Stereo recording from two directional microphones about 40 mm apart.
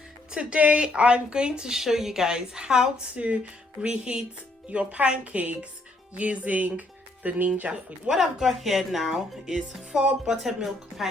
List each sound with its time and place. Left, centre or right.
0.3 s a woman's voice: right
1.7 s speech: centre
3.2 s a woman's voice: right
4.7 s a woman's voice: right
8.1 s speech: centre